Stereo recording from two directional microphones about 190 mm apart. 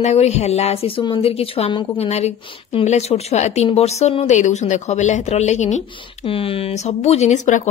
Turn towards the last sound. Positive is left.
turn(degrees=40)  # may be behind; listen again after turning